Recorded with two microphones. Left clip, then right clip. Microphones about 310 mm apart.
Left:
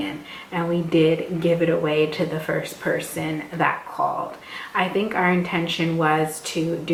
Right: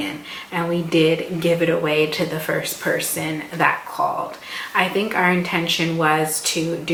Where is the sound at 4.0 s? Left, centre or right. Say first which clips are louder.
Even; centre.